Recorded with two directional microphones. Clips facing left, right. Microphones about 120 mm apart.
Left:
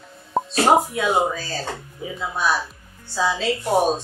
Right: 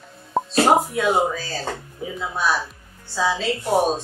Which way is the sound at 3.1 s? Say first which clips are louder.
Even; centre (ahead or behind).